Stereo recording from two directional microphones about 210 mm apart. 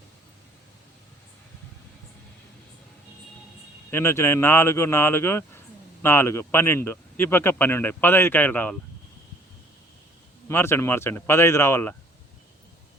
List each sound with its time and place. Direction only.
3.9 s speech: 10° left (ahead or behind)
10.5 s speech: 10° left (ahead or behind)